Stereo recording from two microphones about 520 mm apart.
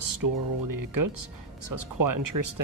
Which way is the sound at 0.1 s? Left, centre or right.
Right.